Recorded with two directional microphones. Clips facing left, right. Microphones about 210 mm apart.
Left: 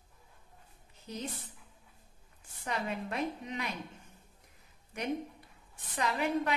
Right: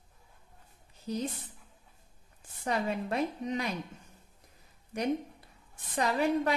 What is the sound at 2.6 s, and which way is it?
A woman's voice, 40° right (ahead or behind).